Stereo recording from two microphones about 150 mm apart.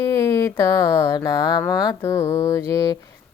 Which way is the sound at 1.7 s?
25° left (ahead or behind).